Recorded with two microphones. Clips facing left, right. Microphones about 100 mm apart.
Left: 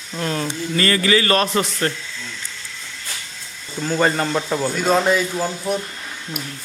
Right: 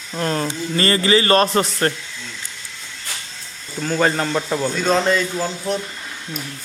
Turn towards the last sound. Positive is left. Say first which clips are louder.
# even
turn(degrees=5)  # may be behind; listen again after turning